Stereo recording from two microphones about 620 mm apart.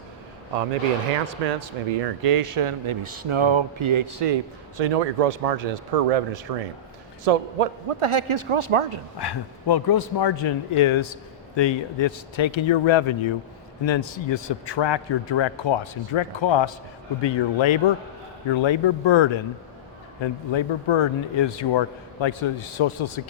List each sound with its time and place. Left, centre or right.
1.5 s speech: right
4.8 s a man's voice: right
9.1 s a man's voice: left